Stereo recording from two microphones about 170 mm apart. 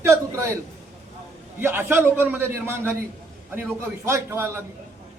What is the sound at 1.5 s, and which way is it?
A man's voice, 15° right (ahead or behind).